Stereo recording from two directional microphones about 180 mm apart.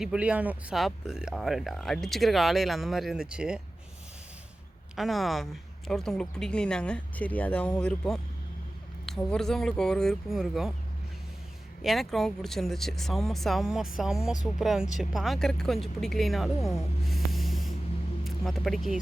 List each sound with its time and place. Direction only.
0.0 s speech: 5° right (ahead or behind)
4.9 s speech: centre (ahead or behind)
11.8 s speech: centre (ahead or behind)
17.1 s snort: centre (ahead or behind)
18.3 s speech: centre (ahead or behind)